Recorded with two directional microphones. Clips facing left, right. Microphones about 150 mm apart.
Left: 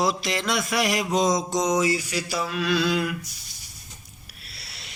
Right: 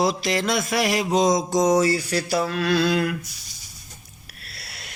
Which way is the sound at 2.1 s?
45° right (ahead or behind).